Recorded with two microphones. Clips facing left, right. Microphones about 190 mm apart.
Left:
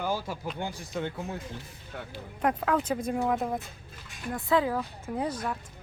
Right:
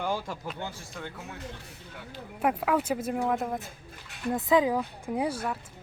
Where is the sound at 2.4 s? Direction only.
5° right (ahead or behind).